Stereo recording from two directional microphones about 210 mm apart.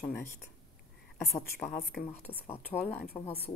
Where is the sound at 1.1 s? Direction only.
Centre (ahead or behind).